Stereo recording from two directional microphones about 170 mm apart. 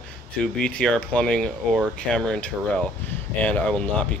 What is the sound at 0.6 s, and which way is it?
Speech, 5° left (ahead or behind).